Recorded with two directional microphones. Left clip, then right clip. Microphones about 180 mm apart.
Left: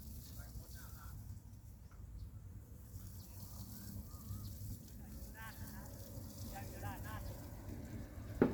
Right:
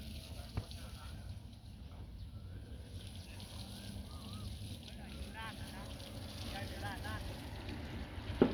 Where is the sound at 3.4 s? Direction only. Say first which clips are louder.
Right 6 dB; 90° left.